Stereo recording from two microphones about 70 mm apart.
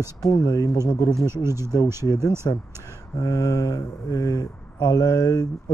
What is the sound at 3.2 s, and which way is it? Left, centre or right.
Speech, left.